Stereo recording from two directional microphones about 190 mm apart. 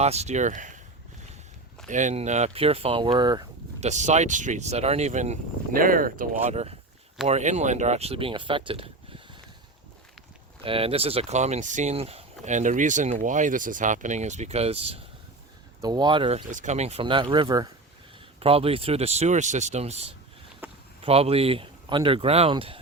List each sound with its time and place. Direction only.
0.0 s speech: 35° right (ahead or behind)
1.9 s speech: 40° right (ahead or behind); by 3.4 s 25° right (ahead or behind)
3.8 s speech: 35° right (ahead or behind)
6.4 s speech: 35° right (ahead or behind)
10.6 s speech: 30° right (ahead or behind)
15.8 s speech: 20° right (ahead or behind)
16.5 s speech: 40° right (ahead or behind)
20.6 s a sound: 10° right (ahead or behind)
21.0 s speech: 30° right (ahead or behind)